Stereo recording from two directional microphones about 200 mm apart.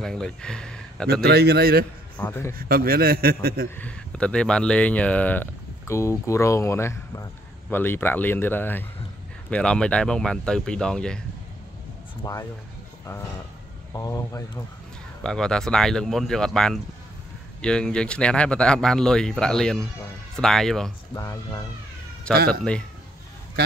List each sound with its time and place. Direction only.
0.0 s speech: 5° left (ahead or behind)
1.2 s a man's voice: 55° right (ahead or behind)
2.1 s speech: 10° left (ahead or behind)
2.5 s a man's voice: 50° right (ahead or behind)
3.7 s speech: 5° left (ahead or behind)
12.2 s speech: 20° left (ahead or behind)
13.9 s speech: 15° left (ahead or behind)
15.2 s speech: 5° left (ahead or behind)
21.1 s speech: 15° left (ahead or behind)
22.5 s speech: 5° left (ahead or behind)